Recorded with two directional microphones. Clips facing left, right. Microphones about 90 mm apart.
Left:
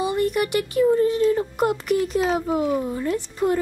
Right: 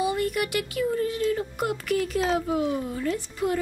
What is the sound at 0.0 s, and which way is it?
A woman's voice, 30° left (ahead or behind).